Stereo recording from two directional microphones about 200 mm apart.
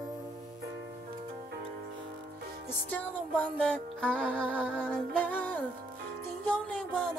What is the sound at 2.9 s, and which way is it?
Music, 5° left (ahead or behind).